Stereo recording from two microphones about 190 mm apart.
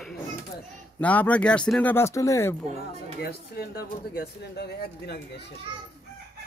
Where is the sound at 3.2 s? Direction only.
55° left (ahead or behind).